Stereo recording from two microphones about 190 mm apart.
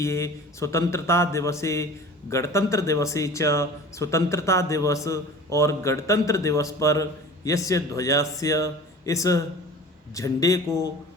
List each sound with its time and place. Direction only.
0.0 s a man's voice: 15° left (ahead or behind)